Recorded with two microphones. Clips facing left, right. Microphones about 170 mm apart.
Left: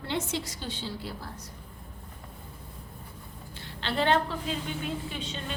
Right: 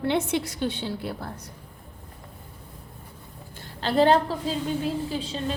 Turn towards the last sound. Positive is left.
turn(degrees=-35)  # may be behind; listen again after turning